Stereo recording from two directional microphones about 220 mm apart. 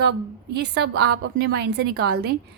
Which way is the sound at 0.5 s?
50° right (ahead or behind).